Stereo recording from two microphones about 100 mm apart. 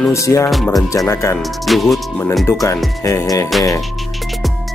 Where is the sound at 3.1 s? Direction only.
35° left (ahead or behind).